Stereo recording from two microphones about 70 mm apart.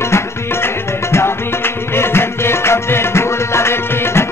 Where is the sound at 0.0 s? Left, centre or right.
Left.